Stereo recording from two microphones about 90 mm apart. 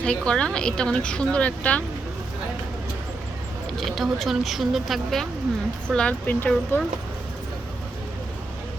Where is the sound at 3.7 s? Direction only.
Centre (ahead or behind); by 6.8 s 20° left (ahead or behind).